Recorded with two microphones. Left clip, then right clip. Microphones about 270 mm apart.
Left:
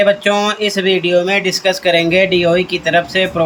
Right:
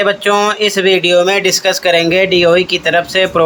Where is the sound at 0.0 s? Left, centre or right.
Centre.